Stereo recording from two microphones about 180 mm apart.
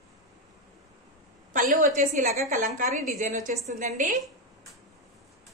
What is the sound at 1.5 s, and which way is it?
A woman's voice, 50° right (ahead or behind).